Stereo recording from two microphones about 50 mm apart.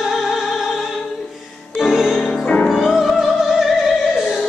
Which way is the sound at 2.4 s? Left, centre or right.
Left.